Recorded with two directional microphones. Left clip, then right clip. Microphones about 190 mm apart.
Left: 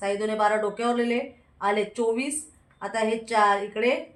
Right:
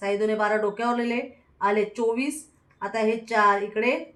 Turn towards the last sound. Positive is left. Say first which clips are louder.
# right 1 dB
turn(degrees=20)  # may be behind; listen again after turning